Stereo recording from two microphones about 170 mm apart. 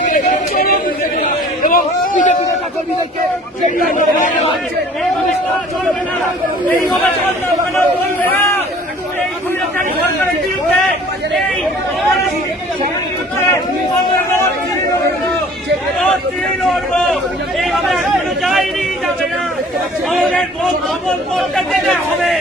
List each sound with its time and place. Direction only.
0.0 s a sound: 55° left (ahead or behind)
3.8 s a man's voice: 50° left (ahead or behind)
8.2 s speech: 10° left (ahead or behind)
16.6 s speech: centre (ahead or behind)
20.1 s speech: 5° left (ahead or behind)